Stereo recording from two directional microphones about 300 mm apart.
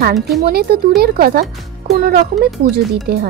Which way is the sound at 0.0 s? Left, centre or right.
Right.